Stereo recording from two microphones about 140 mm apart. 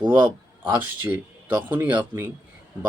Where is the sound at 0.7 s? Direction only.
10° right (ahead or behind).